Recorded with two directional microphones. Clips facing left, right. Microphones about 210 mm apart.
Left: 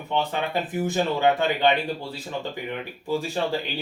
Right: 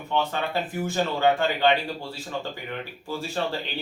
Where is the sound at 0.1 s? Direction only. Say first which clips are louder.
Left 1 dB; 15° left (ahead or behind).